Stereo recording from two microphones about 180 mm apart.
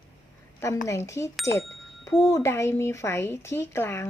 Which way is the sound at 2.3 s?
15° left (ahead or behind).